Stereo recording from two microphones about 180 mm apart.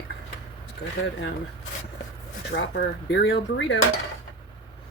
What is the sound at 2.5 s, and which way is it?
Speech, 70° left (ahead or behind).